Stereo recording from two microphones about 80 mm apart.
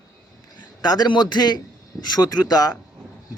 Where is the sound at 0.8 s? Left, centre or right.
Left.